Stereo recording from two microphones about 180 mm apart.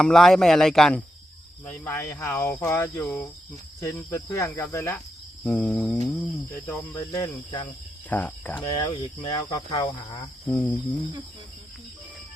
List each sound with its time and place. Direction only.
0.0 s speech: centre (ahead or behind)
4.9 s cricket: 5° left (ahead or behind); by 7.7 s 25° left (ahead or behind)
8.1 s speech: 10° left (ahead or behind)
8.7 s speech: 25° left (ahead or behind)
10.5 s speech: 10° left (ahead or behind)